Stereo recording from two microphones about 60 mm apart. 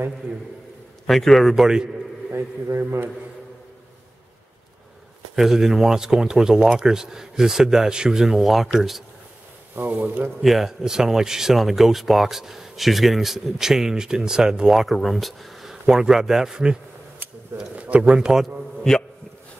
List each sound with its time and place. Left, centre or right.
1.0 s speech: centre
5.3 s speech: centre
9.9 s speech: right
10.4 s speech: centre
17.7 s speech: right